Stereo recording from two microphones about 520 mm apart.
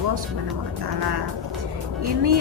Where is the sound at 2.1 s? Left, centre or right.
Right.